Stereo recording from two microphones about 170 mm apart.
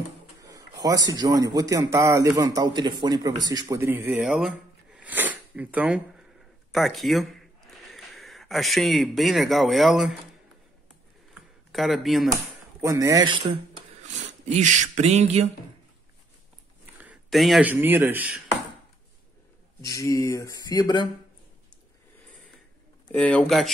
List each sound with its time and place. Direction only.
0.4 s a sound: 20° right (ahead or behind)
0.8 s a man's voice: 20° right (ahead or behind)
4.3 s a sound: 5° right (ahead or behind)
6.7 s speech: centre (ahead or behind)
11.7 s speech: centre (ahead or behind)
12.8 s a man's voice: 20° right (ahead or behind)
14.0 s speech: 45° right (ahead or behind)
17.0 s a man's voice: 5° right (ahead or behind)
19.8 s speech: 20° left (ahead or behind)
23.1 s speech: 5° left (ahead or behind)